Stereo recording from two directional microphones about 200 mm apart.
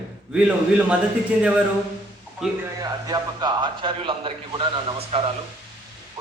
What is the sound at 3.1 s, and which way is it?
A man's voice, 20° right (ahead or behind).